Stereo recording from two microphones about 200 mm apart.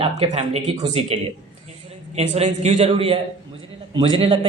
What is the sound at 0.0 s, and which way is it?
A man's voice, 30° right (ahead or behind).